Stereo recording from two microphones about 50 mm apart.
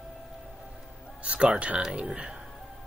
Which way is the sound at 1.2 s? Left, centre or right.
Right.